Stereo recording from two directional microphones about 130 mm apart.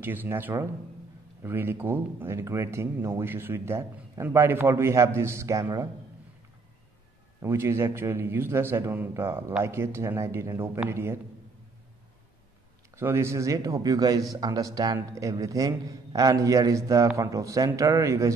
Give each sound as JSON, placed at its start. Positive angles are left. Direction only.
{"t": 0.0, "sound": "a man's voice", "side_deg": -15}
{"t": 7.4, "sound": "a man's voice", "side_deg": -20}
{"t": 12.9, "sound": "speech", "side_deg": -20}